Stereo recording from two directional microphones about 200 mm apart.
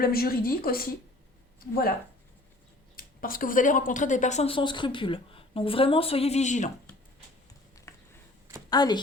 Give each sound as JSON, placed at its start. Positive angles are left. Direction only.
{"t": 0.0, "sound": "speech", "side_deg": 50}
{"t": 8.7, "sound": "speech", "side_deg": 20}